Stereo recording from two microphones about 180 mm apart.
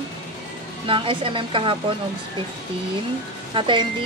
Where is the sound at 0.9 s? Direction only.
30° right (ahead or behind).